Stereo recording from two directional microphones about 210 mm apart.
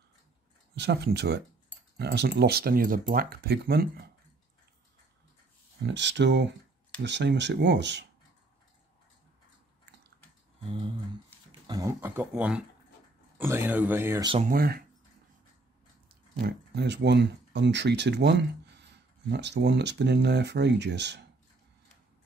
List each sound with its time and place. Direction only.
0.7 s speech: 55° right (ahead or behind)
5.9 s speech: 55° right (ahead or behind)
11.6 s speech: 15° right (ahead or behind)
14.2 s speech: 25° right (ahead or behind)
14.5 s speech: 45° right (ahead or behind)
16.3 s speech: 50° right (ahead or behind)